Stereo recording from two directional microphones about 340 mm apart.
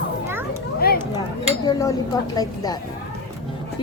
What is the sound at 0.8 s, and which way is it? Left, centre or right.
Speech, left.